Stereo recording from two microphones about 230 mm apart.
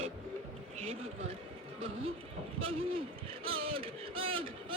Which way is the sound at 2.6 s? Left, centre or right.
Right.